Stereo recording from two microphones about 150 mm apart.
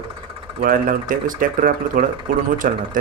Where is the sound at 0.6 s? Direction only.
70° right (ahead or behind).